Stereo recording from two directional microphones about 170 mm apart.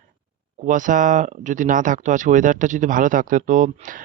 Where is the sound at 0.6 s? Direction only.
50° right (ahead or behind).